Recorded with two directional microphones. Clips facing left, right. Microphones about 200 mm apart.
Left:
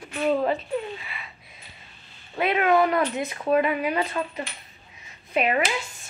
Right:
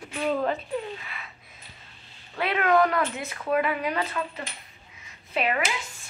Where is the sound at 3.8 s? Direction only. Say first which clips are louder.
Left 3 dB; 10° left (ahead or behind).